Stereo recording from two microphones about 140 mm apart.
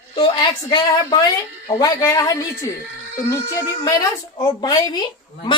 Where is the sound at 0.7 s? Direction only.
30° left (ahead or behind).